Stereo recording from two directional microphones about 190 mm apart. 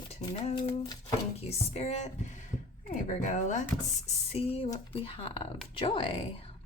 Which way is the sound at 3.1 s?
40° left (ahead or behind).